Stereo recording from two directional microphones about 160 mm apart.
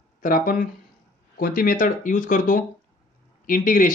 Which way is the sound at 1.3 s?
65° left (ahead or behind).